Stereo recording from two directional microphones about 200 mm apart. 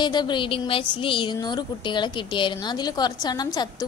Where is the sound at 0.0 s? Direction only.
20° left (ahead or behind).